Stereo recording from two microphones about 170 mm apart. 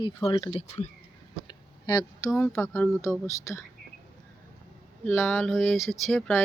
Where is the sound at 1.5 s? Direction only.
25° left (ahead or behind).